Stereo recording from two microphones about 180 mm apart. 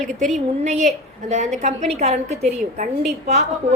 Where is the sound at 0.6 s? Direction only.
40° right (ahead or behind).